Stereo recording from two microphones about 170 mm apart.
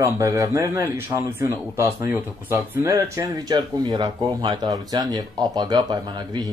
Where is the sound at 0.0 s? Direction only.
20° right (ahead or behind).